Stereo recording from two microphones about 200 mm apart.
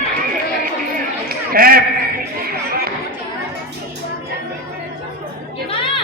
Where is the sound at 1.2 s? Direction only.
45° right (ahead or behind).